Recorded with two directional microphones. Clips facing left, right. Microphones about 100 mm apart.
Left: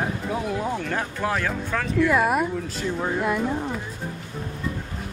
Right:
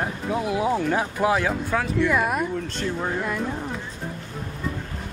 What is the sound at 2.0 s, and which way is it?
Speech, centre (ahead or behind).